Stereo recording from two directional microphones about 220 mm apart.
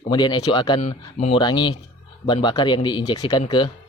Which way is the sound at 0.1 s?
20° left (ahead or behind).